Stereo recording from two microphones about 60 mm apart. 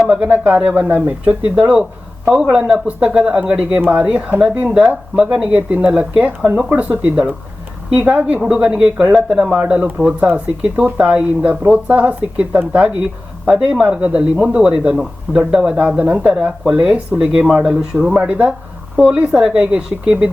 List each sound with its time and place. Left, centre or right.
0.0 s speech: right
18.2 s speech: right